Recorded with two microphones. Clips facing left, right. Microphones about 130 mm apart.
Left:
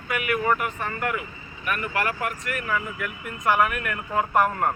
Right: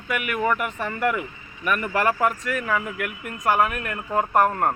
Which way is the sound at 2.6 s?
80° right.